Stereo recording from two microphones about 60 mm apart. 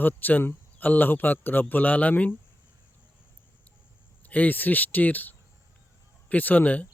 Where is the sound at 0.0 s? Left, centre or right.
Left.